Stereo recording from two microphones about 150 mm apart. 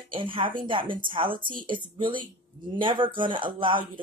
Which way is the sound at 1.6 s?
35° right (ahead or behind).